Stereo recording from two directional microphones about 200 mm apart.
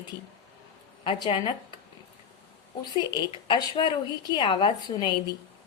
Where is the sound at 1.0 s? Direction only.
25° left (ahead or behind).